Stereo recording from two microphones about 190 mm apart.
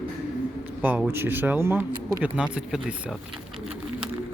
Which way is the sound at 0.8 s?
10° right (ahead or behind).